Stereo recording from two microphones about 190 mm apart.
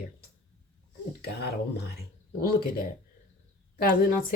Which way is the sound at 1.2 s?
55° left (ahead or behind).